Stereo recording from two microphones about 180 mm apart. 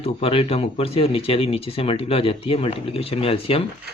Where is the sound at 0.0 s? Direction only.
30° left (ahead or behind).